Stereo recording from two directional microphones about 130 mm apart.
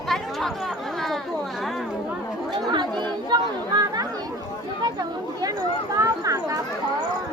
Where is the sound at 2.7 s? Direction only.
35° right (ahead or behind).